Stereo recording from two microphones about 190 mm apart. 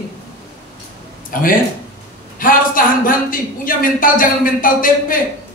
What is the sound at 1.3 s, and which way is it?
A man's voice, 45° left (ahead or behind).